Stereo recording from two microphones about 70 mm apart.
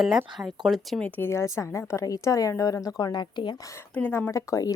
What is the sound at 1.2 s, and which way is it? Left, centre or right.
A woman's voice, left.